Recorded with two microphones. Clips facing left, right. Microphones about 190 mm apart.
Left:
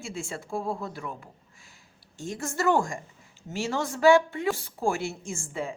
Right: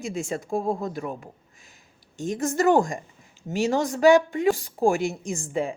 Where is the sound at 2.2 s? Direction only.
20° right (ahead or behind).